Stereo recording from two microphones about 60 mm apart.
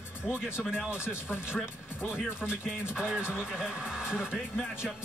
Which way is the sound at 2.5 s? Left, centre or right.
Centre.